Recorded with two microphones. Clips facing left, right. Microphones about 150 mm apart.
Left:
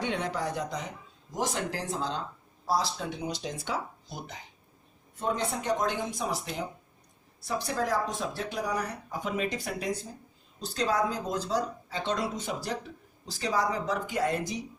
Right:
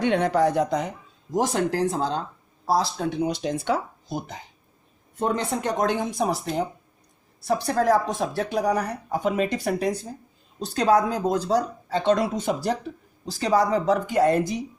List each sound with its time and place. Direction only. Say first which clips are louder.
0.0 s a woman's voice: right 11 dB; 65° right (ahead or behind)
5.2 s speech: right 5 dB; 70° right (ahead or behind)
7.4 s a woman's voice: right 9 dB; 65° right (ahead or behind)